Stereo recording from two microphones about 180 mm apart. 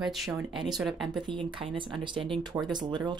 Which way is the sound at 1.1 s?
30° right (ahead or behind).